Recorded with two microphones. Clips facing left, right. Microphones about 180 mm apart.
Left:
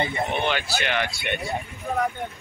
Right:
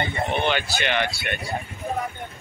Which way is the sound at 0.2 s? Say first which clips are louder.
Right 1 dB; centre (ahead or behind).